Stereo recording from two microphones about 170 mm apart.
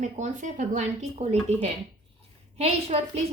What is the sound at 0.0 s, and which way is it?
Speech, 45° right (ahead or behind).